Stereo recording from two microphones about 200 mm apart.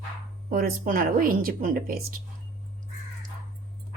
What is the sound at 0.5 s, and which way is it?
Speech, 45° right (ahead or behind).